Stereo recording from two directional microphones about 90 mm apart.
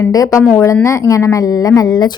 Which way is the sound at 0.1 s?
40° left (ahead or behind).